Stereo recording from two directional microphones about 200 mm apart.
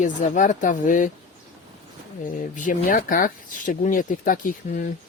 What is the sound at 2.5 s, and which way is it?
Speech, 40° left (ahead or behind).